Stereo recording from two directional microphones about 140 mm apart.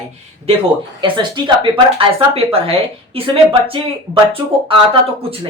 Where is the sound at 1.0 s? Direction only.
35° right (ahead or behind).